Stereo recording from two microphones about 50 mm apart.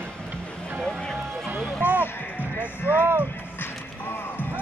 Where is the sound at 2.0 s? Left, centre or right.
Left.